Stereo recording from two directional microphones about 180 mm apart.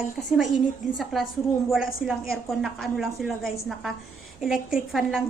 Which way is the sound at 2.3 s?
Centre (ahead or behind).